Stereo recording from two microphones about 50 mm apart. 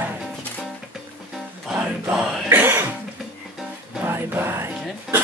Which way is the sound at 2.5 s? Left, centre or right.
Right.